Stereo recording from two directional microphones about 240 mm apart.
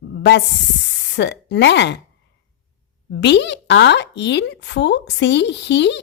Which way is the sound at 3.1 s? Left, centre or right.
Left.